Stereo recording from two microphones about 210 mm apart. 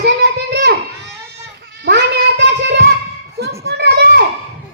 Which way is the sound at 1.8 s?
55° right (ahead or behind).